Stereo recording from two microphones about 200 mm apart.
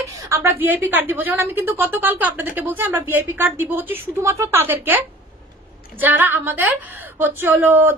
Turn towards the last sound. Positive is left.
turn(degrees=-10)  # may be behind; listen again after turning